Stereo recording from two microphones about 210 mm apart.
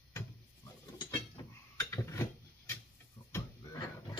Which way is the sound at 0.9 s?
15° left (ahead or behind).